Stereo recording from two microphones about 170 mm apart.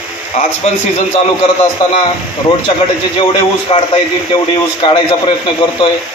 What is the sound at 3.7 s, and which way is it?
Speech, 35° left (ahead or behind).